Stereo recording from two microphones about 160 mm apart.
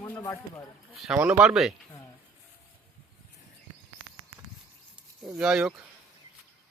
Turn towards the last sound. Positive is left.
turn(degrees=-5)  # may be behind; listen again after turning